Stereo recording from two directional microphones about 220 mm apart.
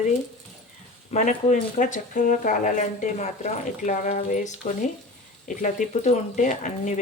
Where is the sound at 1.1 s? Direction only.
35° left (ahead or behind).